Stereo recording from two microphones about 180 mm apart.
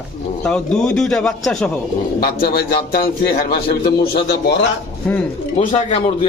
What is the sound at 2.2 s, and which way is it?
A man's voice, 55° left (ahead or behind).